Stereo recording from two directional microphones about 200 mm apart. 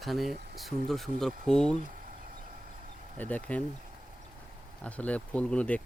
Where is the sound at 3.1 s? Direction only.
10° left (ahead or behind).